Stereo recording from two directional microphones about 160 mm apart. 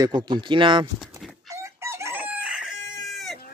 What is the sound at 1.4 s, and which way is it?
Chicken, 15° right (ahead or behind).